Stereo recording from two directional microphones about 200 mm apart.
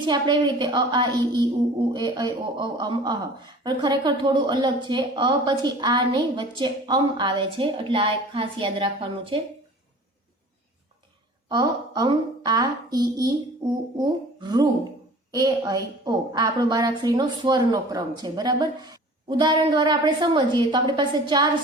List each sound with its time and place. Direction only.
0.0 s speech: 20° right (ahead or behind)
11.4 s a woman's voice: 20° right (ahead or behind)